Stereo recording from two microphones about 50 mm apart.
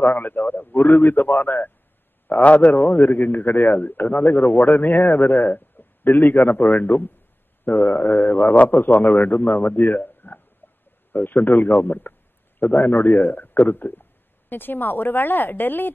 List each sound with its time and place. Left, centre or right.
0.0 s a man's voice: left
10.6 s a sound: left
11.1 s a man's voice: left